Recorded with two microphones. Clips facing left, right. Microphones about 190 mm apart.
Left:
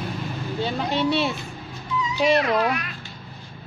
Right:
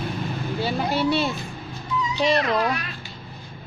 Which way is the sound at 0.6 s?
5° right (ahead or behind).